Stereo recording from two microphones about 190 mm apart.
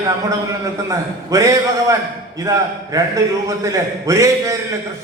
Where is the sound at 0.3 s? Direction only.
15° right (ahead or behind).